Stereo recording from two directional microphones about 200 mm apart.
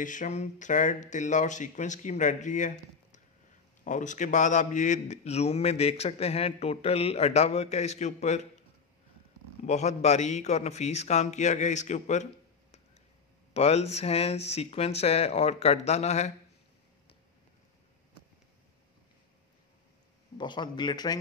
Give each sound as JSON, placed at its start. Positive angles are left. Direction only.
{"t": 0.0, "sound": "a man's voice", "side_deg": 40}
{"t": 9.7, "sound": "a man's voice", "side_deg": 35}
{"t": 13.5, "sound": "a man's voice", "side_deg": 30}
{"t": 20.3, "sound": "speech", "side_deg": 20}